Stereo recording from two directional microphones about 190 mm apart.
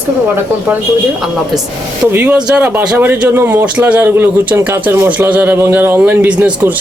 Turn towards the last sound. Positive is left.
turn(degrees=-10)  # may be behind; listen again after turning